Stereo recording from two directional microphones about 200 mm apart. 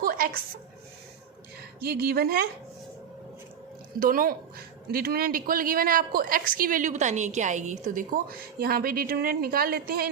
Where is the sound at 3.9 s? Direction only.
45° right (ahead or behind).